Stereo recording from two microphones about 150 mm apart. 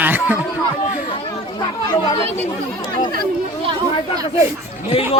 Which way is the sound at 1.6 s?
30° left (ahead or behind).